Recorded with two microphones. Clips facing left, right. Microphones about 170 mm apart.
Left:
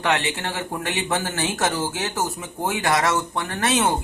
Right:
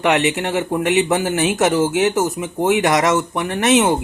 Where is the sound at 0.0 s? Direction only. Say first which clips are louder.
Right 7 dB; 20° right (ahead or behind).